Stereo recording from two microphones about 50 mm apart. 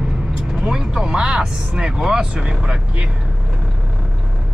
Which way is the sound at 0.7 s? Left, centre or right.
Centre.